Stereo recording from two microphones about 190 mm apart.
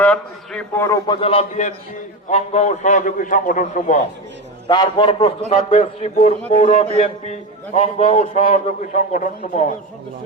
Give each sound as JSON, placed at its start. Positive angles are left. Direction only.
{"t": 0.0, "sound": "a man's voice", "side_deg": 5}
{"t": 0.9, "sound": "a man's voice", "side_deg": 20}
{"t": 4.7, "sound": "a man's voice", "side_deg": 25}